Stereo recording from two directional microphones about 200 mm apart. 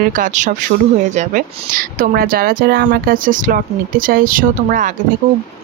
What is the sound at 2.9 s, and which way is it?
Speech, 45° right (ahead or behind).